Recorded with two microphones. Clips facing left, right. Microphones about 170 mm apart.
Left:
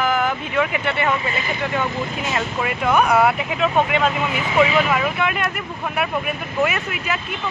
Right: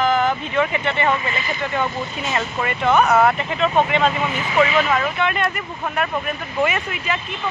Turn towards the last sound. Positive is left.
turn(degrees=5)  # may be behind; listen again after turning